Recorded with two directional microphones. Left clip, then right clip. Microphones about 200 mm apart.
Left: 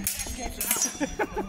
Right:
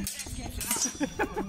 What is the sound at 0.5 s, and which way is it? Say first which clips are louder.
Music: left 2 dB; centre (ahead or behind).